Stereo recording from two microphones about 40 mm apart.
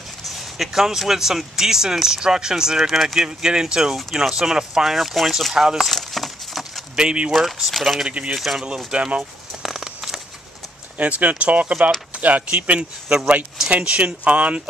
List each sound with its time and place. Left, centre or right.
0.2 s speech: centre
3.3 s speech: centre
4.9 s speech: centre
5.9 s a sound: centre
7.0 s speech: right
7.3 s speech: centre
8.1 s speech: right
9.6 s a sound: centre
11.0 s speech: right